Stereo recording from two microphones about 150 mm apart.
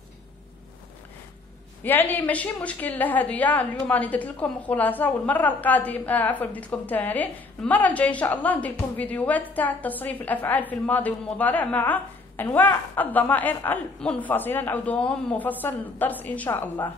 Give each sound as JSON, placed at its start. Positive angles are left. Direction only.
{"t": 1.8, "sound": "a woman's voice", "side_deg": 15}